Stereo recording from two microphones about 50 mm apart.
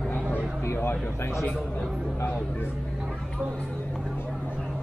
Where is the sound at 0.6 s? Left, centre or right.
Left.